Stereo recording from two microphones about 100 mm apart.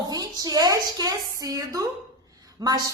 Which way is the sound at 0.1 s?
40° right (ahead or behind).